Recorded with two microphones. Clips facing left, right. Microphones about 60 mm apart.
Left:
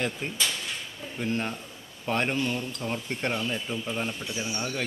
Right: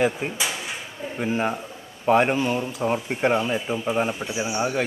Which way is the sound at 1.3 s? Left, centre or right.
Centre.